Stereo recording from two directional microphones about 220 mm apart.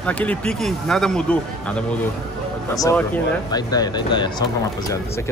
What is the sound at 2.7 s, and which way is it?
Speech, 15° left (ahead or behind).